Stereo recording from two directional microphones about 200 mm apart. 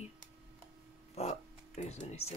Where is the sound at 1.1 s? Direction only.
35° left (ahead or behind).